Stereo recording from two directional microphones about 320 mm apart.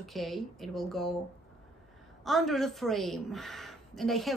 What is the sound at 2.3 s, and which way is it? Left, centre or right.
A woman's voice, centre.